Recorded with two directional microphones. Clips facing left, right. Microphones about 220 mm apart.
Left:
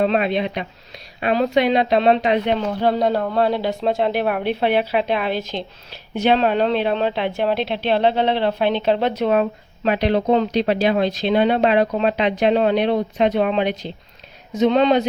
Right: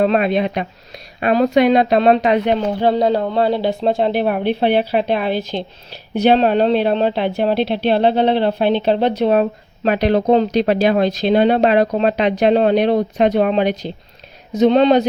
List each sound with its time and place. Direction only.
0.0 s speech: 50° right (ahead or behind)
2.8 s speech: 25° right (ahead or behind)
5.3 s speech: centre (ahead or behind)
6.1 s speech: 35° right (ahead or behind)